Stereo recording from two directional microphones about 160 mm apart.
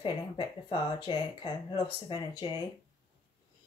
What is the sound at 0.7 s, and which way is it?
Speech, 30° left (ahead or behind).